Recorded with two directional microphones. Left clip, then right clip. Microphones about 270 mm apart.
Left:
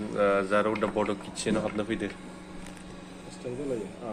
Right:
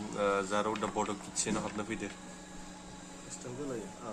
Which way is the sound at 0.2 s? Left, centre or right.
Centre.